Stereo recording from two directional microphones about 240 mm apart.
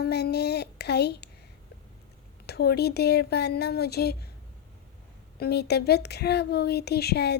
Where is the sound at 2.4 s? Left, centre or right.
Left.